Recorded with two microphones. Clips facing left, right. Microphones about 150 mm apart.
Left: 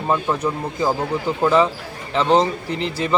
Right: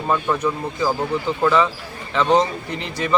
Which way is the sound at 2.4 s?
30° left (ahead or behind).